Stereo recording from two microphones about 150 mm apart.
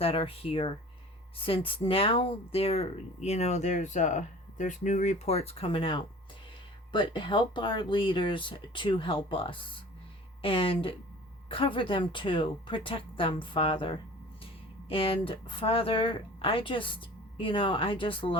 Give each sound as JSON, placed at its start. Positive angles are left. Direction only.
{"t": 0.0, "sound": "speech", "side_deg": 40}